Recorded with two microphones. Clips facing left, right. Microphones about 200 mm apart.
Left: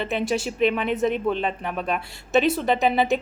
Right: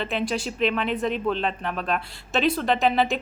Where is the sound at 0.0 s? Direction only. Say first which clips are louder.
Left 2 dB; 15° left (ahead or behind).